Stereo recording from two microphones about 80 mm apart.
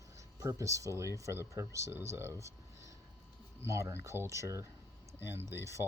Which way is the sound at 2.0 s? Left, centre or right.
Right.